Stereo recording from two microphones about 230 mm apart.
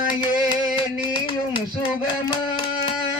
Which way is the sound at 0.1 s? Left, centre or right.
Left.